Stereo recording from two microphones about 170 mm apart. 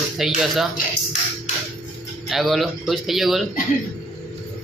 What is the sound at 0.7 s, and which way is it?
Speech, 40° left (ahead or behind).